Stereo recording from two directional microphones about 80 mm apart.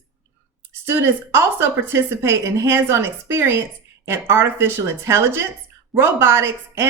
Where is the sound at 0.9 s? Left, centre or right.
Right.